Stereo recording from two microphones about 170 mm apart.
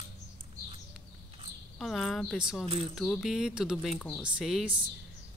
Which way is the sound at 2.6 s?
35° right (ahead or behind).